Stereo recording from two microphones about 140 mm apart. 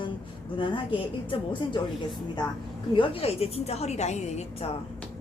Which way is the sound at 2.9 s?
40° left (ahead or behind).